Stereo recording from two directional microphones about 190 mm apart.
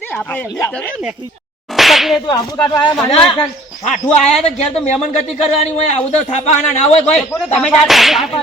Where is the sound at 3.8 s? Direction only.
40° left (ahead or behind).